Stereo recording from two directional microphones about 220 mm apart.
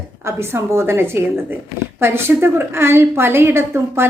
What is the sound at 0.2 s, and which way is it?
A woman's voice, 10° right (ahead or behind).